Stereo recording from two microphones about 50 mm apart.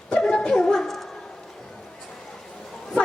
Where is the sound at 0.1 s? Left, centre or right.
Centre.